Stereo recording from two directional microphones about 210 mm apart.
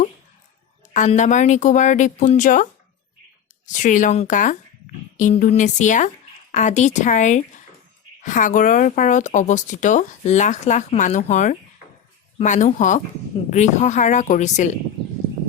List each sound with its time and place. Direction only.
0.9 s speech: 35° left (ahead or behind)
3.7 s speech: 35° left (ahead or behind)